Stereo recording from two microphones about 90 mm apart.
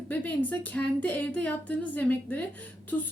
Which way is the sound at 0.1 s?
20° left (ahead or behind).